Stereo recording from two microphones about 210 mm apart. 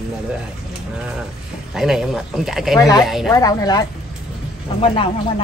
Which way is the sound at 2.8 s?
15° left (ahead or behind).